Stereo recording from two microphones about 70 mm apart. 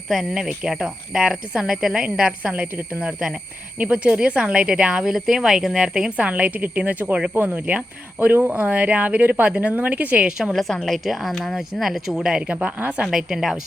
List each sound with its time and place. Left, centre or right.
0.1 s speech: centre
2.0 s speech: centre
10.2 s speech: centre
13.1 s speech: centre